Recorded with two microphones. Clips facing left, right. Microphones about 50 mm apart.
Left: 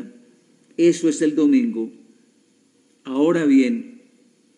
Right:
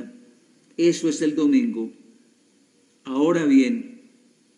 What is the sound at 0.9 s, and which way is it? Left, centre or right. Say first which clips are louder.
Speech: left 3 dB; centre.